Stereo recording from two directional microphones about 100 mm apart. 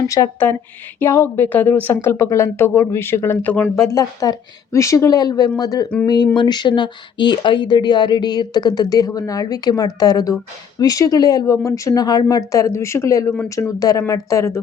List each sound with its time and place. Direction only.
0.2 s speech: 45° left (ahead or behind)
0.9 s speech: 20° left (ahead or behind)